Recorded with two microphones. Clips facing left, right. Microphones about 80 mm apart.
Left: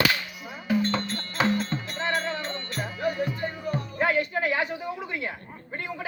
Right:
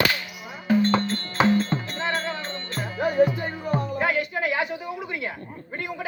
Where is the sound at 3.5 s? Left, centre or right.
Right.